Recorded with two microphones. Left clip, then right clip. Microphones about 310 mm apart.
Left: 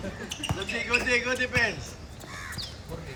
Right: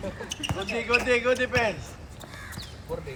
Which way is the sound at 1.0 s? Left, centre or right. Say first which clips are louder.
Right 2 dB; centre.